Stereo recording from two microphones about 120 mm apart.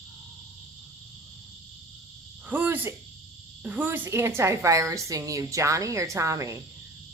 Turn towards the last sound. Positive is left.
turn(degrees=-25)  # may be behind; listen again after turning